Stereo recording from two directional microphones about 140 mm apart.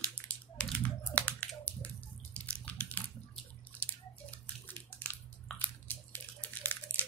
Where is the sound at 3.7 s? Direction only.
10° left (ahead or behind).